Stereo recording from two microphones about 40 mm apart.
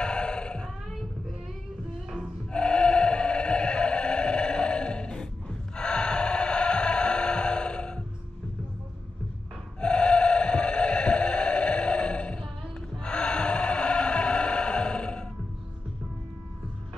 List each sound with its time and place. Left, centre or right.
0.0 s cat: left
2.5 s music: left
9.8 s a sound: left
13.0 s music: left